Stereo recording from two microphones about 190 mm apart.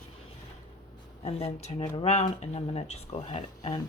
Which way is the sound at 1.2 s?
35° left (ahead or behind).